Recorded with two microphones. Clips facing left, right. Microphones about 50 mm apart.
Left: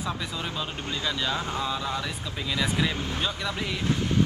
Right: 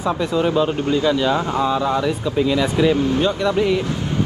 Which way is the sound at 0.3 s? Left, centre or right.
Centre.